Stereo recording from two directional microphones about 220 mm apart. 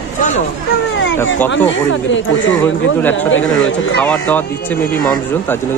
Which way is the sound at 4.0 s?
5° left (ahead or behind).